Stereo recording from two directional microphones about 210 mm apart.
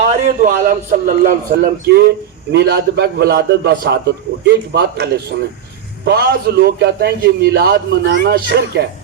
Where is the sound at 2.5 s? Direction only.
50° right (ahead or behind).